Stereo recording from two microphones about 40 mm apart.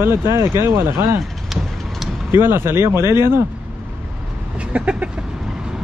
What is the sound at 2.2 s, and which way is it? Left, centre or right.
Speech, right.